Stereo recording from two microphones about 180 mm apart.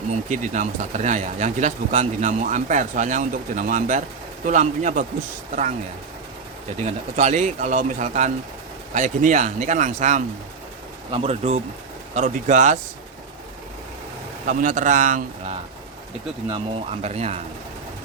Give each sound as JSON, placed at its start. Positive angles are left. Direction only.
{"t": 0.1, "sound": "speech", "side_deg": -40}
{"t": 6.7, "sound": "speech", "side_deg": -40}
{"t": 12.1, "sound": "speech", "side_deg": -45}
{"t": 14.4, "sound": "speech", "side_deg": -45}
{"t": 16.5, "sound": "speech", "side_deg": -35}